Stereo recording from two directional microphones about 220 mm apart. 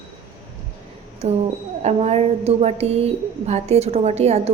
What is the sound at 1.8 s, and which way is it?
A woman's voice, 30° right (ahead or behind).